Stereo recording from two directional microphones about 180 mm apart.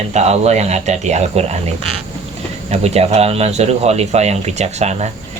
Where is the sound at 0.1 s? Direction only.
40° right (ahead or behind).